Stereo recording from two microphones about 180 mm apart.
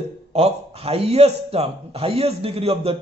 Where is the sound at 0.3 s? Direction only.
35° right (ahead or behind).